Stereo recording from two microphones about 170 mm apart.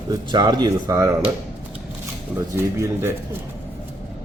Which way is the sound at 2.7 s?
15° right (ahead or behind).